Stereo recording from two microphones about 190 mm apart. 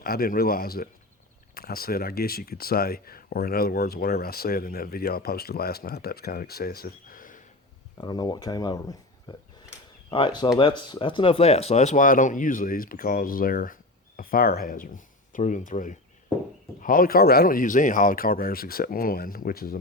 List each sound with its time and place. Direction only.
0.0 s speech: 50° left (ahead or behind)
7.9 s speech: 20° left (ahead or behind); by 19.8 s 50° left (ahead or behind)